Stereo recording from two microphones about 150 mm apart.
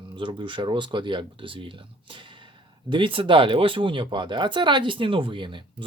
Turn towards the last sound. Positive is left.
turn(degrees=-35)  # may be behind; listen again after turning